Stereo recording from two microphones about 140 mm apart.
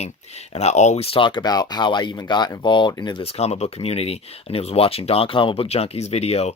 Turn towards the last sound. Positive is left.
turn(degrees=50)  # may be behind; listen again after turning